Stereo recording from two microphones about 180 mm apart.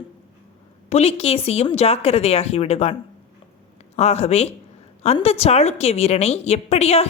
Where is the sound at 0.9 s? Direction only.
35° left (ahead or behind).